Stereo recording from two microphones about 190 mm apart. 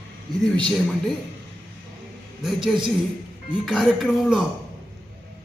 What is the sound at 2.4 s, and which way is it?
A man's voice, centre (ahead or behind).